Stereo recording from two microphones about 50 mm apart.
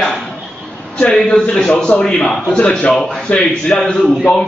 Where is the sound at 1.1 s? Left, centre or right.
Centre.